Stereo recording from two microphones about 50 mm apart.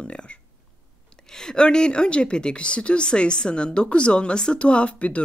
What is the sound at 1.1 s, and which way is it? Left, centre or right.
A woman's voice, centre.